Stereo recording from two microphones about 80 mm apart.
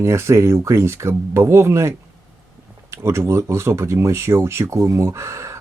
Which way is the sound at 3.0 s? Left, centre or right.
Right.